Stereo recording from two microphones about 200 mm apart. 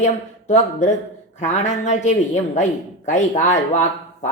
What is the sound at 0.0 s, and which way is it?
Speech, 35° left (ahead or behind).